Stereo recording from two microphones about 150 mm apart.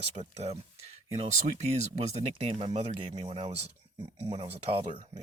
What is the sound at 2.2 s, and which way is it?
Speech, 45° right (ahead or behind).